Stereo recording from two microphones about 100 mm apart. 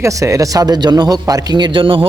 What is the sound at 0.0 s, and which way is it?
Speech, 30° right (ahead or behind).